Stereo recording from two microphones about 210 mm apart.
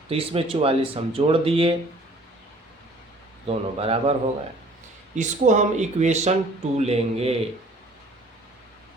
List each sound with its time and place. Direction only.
0.1 s speech: 25° right (ahead or behind)
3.4 s speech: 30° right (ahead or behind)
5.1 s speech: 35° right (ahead or behind)